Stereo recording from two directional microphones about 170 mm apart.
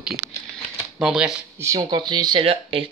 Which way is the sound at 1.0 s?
5° right (ahead or behind).